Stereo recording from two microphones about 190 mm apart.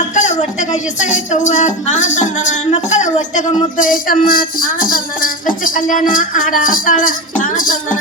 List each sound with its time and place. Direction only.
0.1 s speech: 40° left (ahead or behind)
6.8 s music: 45° left (ahead or behind)